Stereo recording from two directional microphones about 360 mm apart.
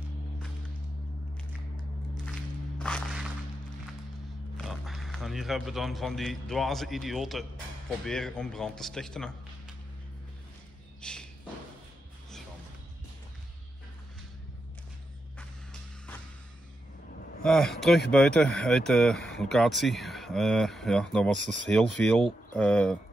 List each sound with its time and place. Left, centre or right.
2.8 s a sound: centre
4.6 s a man's voice: centre
11.0 s a sound: centre
17.5 s speech: centre
21.4 s speech: left
21.6 s speech: centre